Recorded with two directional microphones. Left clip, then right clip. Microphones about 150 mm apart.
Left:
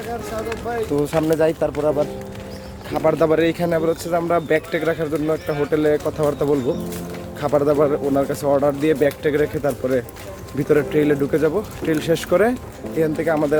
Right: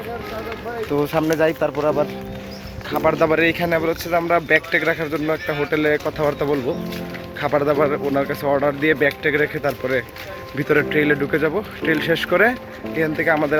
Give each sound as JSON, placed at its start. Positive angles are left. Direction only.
{"t": 1.0, "sound": "speech", "side_deg": -15}
{"t": 2.9, "sound": "speech", "side_deg": 0}
{"t": 8.8, "sound": "speech", "side_deg": 10}